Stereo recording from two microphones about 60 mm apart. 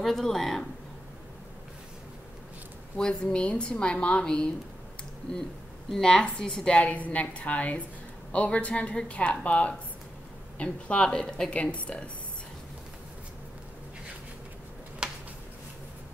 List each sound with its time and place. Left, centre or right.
0.0 s speech: centre
3.0 s a woman's voice: centre
5.9 s a woman's voice: centre
6.8 s a woman's voice: left
15.0 s a sound: centre